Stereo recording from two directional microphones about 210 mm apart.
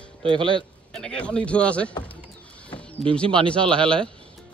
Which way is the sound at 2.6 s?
5° left (ahead or behind).